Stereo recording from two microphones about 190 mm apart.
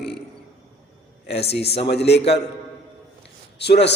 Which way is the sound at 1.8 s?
60° left (ahead or behind).